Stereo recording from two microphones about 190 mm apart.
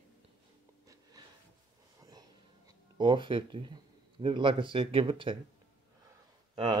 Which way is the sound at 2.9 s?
25° right (ahead or behind).